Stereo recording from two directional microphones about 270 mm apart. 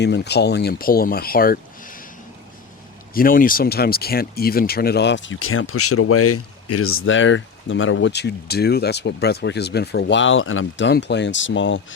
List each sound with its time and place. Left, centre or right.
0.0 s speech: left
3.2 s speech: left